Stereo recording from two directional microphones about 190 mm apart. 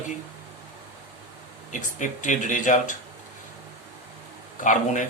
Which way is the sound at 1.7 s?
40° left (ahead or behind).